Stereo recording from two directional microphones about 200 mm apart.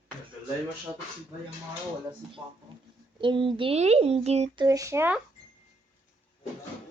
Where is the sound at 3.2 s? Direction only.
25° right (ahead or behind).